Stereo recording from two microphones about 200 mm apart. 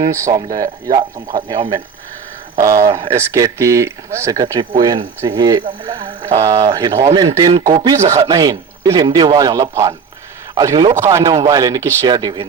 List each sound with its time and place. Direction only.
0.1 s a man's voice: 15° right (ahead or behind)